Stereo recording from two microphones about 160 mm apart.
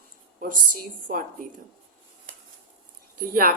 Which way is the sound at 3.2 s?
65° right (ahead or behind).